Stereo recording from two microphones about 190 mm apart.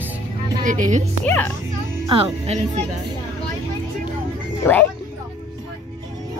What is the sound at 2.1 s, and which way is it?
Speech, 30° right (ahead or behind).